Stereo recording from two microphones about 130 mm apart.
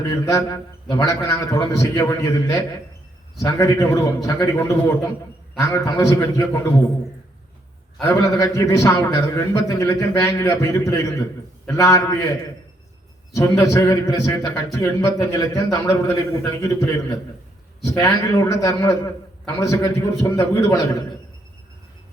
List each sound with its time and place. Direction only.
0.1 s a man's voice: 25° left (ahead or behind)
8.0 s a man's voice: 25° left (ahead or behind)
13.3 s a man's voice: 25° left (ahead or behind)